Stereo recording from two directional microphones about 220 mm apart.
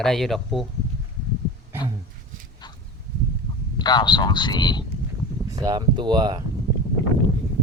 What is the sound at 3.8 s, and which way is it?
Speech, 20° left (ahead or behind).